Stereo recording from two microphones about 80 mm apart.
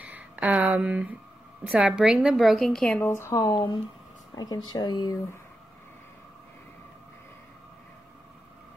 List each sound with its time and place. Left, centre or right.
0.0 s a sound: centre
1.6 s a woman's voice: centre
3.0 s speech: left
4.4 s speech: left